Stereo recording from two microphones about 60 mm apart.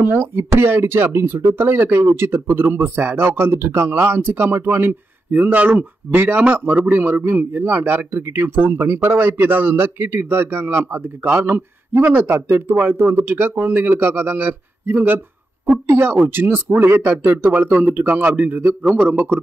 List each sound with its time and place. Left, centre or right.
0.0 s speech: right
12.0 s a man's voice: right